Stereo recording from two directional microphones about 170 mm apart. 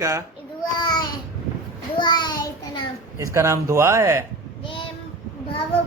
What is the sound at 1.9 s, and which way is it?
Speech, 25° left (ahead or behind).